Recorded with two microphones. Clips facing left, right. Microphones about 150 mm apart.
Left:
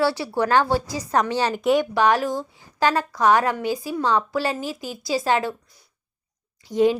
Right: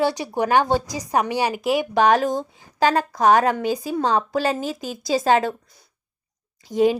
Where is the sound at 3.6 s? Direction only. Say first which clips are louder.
Right 2 dB; 20° right (ahead or behind).